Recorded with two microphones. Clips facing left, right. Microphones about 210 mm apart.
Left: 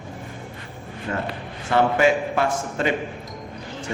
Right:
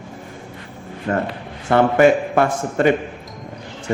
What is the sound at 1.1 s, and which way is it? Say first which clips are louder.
A man's voice: right 6 dB; 50° right (ahead or behind).